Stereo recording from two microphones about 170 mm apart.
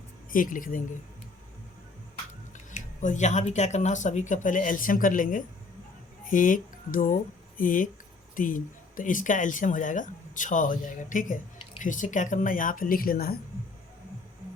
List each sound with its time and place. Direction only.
0.3 s speech: 50° left (ahead or behind)
2.7 s speech: 45° left (ahead or behind); by 13.4 s 60° left (ahead or behind)